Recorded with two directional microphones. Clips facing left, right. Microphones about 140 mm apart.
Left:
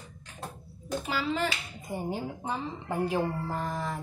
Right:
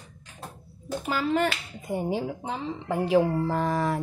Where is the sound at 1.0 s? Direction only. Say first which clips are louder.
Right 6 dB; 50° right (ahead or behind); by 4.0 s 75° right (ahead or behind).